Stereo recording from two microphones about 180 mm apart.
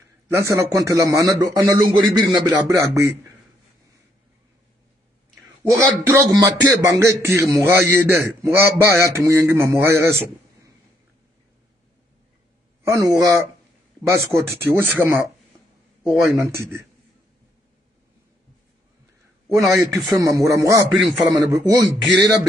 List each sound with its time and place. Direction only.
0.3 s a man's voice: 15° right (ahead or behind)
5.3 s a man's voice: 15° right (ahead or behind)
12.8 s a man's voice: 15° right (ahead or behind)
16.1 s a man's voice: centre (ahead or behind)
16.3 s a man's voice: 15° right (ahead or behind)
19.5 s a man's voice: centre (ahead or behind)
20.4 s a man's voice: 15° right (ahead or behind)
21.0 s a man's voice: centre (ahead or behind)
21.5 s a man's voice: 20° right (ahead or behind)